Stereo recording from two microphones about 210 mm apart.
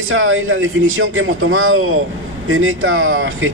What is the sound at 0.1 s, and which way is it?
Speech, 75° right (ahead or behind).